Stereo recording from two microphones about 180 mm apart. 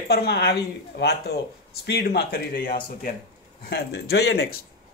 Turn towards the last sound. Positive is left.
turn(degrees=65)  # may be behind; listen again after turning